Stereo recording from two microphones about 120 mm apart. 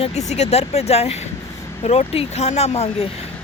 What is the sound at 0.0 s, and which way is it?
Speech, 70° left (ahead or behind).